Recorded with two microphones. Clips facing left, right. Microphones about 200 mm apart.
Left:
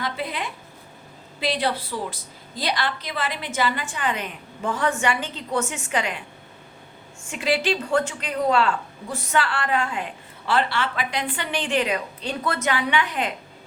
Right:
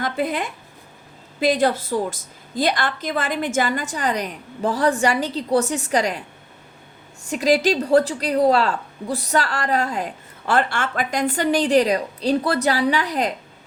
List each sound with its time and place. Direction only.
0.0 s a woman's voice: 45° right (ahead or behind)
7.3 s a woman's voice: 40° right (ahead or behind)